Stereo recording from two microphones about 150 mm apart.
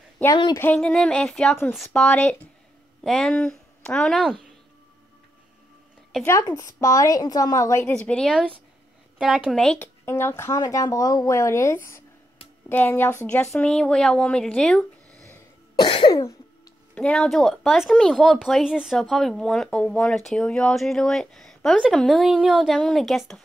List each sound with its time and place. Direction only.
0.6 s a woman's voice: 10° left (ahead or behind)
6.2 s a woman's voice: 20° left (ahead or behind)
7.9 s speech: 5° left (ahead or behind)
9.2 s speech: 5° right (ahead or behind)
10.0 s a woman's voice: 15° left (ahead or behind)
15.3 s cough: 25° left (ahead or behind)
16.9 s speech: 5° left (ahead or behind)